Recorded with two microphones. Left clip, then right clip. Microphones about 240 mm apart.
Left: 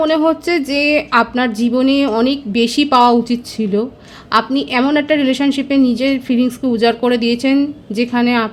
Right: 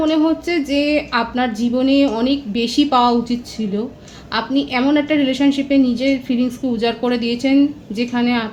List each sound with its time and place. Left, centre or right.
0.0 s a woman's voice: left